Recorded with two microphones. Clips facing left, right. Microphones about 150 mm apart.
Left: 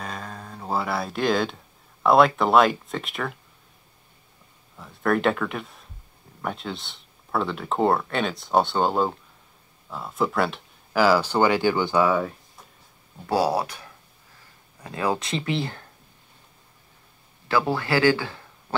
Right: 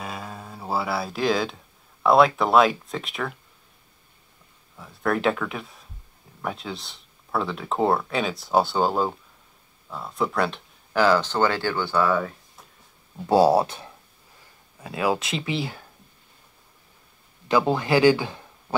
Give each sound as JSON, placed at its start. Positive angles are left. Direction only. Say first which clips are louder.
{"t": 0.0, "sound": "music", "louder": "even", "side_deg": -5}
{"t": 2.0, "sound": "speech", "louder": "even", "side_deg": 0}
{"t": 4.7, "sound": "speech", "louder": "left 2 dB", "side_deg": 0}
{"t": 13.3, "sound": "speech", "louder": "right 5 dB", "side_deg": -25}
{"t": 14.8, "sound": "speech", "louder": "right 1 dB", "side_deg": -10}
{"t": 17.5, "sound": "speech", "louder": "right 2 dB", "side_deg": -20}